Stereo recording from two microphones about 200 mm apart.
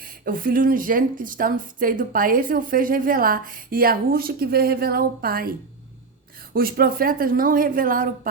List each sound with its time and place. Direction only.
0.0 s speech: 45° right (ahead or behind)